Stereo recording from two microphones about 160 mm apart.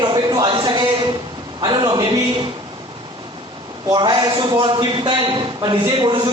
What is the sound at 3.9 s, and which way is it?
A man's voice, 30° right (ahead or behind).